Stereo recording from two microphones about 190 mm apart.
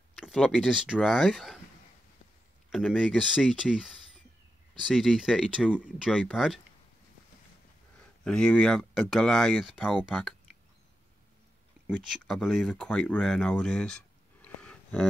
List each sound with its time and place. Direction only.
0.2 s speech: centre (ahead or behind)
2.7 s speech: 5° left (ahead or behind)
8.2 s speech: 5° left (ahead or behind)
11.9 s speech: centre (ahead or behind)